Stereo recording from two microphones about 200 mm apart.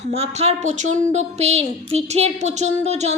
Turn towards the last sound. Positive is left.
turn(degrees=-35)  # may be behind; listen again after turning